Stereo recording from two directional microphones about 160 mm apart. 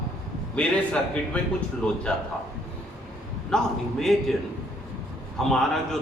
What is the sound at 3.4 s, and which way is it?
Speech, 5° left (ahead or behind).